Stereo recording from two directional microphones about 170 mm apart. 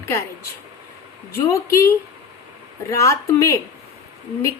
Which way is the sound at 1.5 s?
15° left (ahead or behind).